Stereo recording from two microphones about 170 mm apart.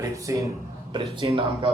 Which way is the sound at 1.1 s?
30° right (ahead or behind).